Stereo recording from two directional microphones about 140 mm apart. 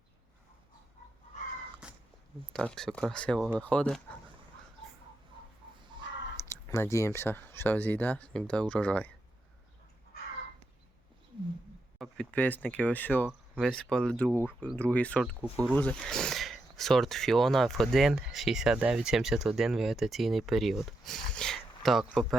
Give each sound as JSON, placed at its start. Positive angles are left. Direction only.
{"t": 1.8, "sound": "cat", "side_deg": -5}
{"t": 2.5, "sound": "speech", "side_deg": 5}
{"t": 6.0, "sound": "a sound", "side_deg": -35}
{"t": 6.5, "sound": "speech", "side_deg": 20}
{"t": 11.9, "sound": "speech", "side_deg": 5}